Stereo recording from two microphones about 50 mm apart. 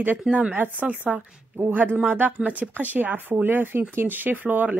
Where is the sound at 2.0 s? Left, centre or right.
Right.